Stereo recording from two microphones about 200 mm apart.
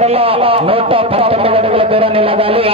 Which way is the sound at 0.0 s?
30° right (ahead or behind).